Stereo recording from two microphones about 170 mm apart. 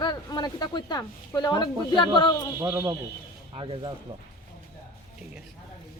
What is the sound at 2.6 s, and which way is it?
Speech, 20° right (ahead or behind).